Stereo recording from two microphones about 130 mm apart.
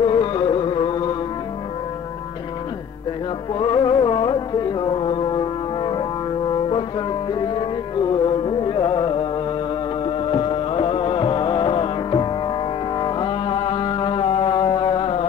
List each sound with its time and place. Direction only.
0.0 s music: 40° left (ahead or behind)
3.5 s music: 40° left (ahead or behind)